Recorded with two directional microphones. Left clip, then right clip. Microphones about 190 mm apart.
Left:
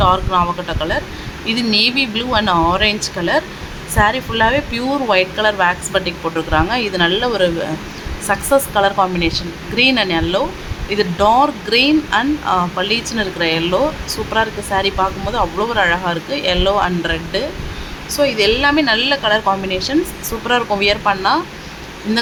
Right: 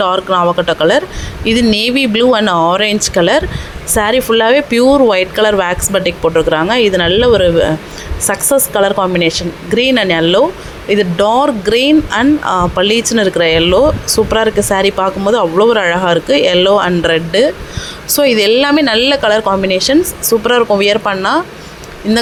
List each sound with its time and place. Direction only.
0.0 s a woman's voice: 30° right (ahead or behind)